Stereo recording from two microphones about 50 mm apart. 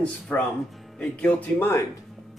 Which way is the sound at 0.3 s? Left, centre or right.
Left.